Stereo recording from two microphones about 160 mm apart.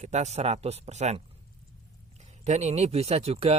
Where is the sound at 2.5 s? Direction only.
40° right (ahead or behind).